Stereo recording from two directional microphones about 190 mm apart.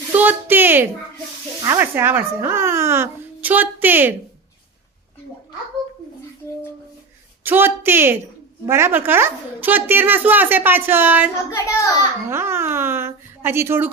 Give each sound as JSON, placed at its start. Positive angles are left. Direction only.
{"t": 0.2, "sound": "a woman's voice", "side_deg": -10}
{"t": 7.4, "sound": "a woman's voice", "side_deg": -10}
{"t": 11.5, "sound": "a child's voice", "side_deg": 15}
{"t": 12.3, "sound": "a woman's voice", "side_deg": -15}